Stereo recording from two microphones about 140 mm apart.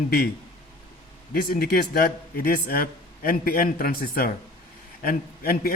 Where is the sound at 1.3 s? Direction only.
90° left.